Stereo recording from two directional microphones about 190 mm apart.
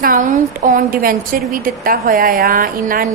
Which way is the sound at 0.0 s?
45° right (ahead or behind).